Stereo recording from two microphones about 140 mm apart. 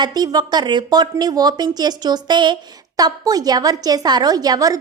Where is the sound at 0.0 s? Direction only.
30° right (ahead or behind).